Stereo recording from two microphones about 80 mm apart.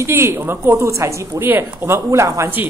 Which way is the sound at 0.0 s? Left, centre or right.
Right.